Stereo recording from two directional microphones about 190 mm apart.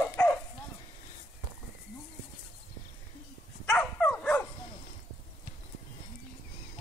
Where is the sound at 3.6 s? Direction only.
10° left (ahead or behind).